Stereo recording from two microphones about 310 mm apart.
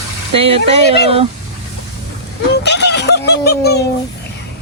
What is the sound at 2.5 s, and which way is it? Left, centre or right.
Fowl, left.